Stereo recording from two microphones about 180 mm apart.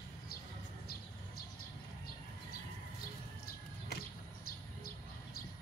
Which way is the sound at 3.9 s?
60° left (ahead or behind).